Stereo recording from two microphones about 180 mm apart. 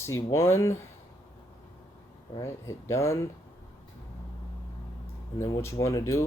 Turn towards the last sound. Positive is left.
turn(degrees=15)  # may be behind; listen again after turning